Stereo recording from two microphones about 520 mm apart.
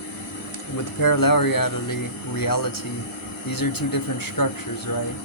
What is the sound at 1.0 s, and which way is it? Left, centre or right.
Speech, left.